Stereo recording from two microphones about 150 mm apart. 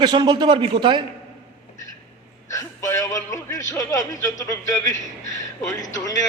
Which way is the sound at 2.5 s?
20° left (ahead or behind).